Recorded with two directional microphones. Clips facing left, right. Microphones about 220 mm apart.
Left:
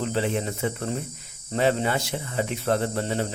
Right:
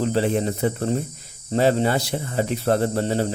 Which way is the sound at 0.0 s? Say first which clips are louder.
Right 5 dB; 40° right (ahead or behind).